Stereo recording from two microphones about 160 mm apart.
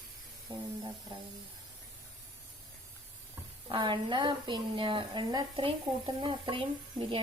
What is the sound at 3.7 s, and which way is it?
Speech, 30° right (ahead or behind).